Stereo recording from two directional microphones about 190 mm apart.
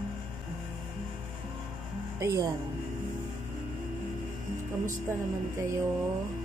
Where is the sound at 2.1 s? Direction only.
15° right (ahead or behind).